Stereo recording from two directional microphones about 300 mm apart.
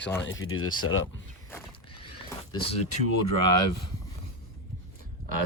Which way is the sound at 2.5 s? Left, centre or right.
Centre.